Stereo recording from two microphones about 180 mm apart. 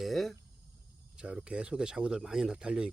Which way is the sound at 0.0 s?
Centre (ahead or behind).